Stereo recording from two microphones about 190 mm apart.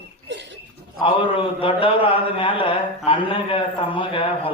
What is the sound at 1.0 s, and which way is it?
A man's voice, 30° left (ahead or behind).